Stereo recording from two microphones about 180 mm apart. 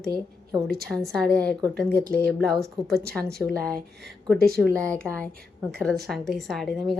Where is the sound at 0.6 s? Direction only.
60° right (ahead or behind).